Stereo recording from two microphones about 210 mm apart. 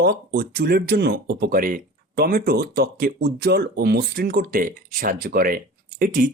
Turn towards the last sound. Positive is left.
turn(degrees=-40)  # may be behind; listen again after turning